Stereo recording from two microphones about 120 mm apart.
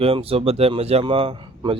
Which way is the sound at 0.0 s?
55° right (ahead or behind).